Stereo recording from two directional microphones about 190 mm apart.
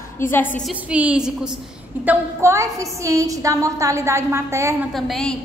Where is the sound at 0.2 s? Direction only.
10° left (ahead or behind).